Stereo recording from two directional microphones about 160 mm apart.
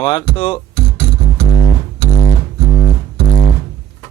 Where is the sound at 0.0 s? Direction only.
30° left (ahead or behind).